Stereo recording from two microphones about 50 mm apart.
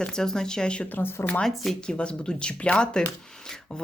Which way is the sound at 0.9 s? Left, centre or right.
Left.